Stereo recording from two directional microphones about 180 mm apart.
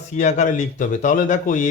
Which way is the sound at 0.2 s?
40° left (ahead or behind).